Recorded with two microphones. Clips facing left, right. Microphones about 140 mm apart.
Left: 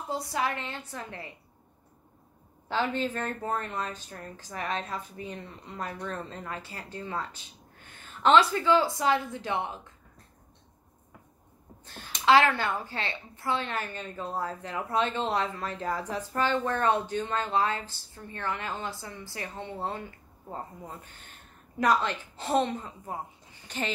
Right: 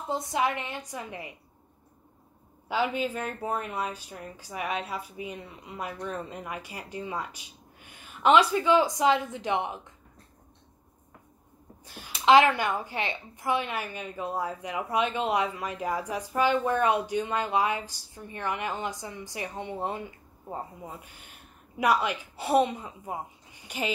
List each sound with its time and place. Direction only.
0.1 s a woman's voice: 20° right (ahead or behind)
2.7 s a woman's voice: 10° right (ahead or behind)
11.8 s a woman's voice: 10° right (ahead or behind)